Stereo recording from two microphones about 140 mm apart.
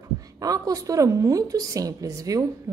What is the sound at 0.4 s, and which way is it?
A woman's voice, 25° right (ahead or behind).